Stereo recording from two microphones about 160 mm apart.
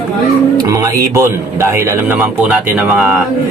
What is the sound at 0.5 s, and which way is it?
A man's voice, 20° right (ahead or behind).